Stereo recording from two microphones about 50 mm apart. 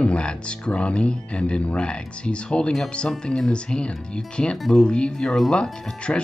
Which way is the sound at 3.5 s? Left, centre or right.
Centre.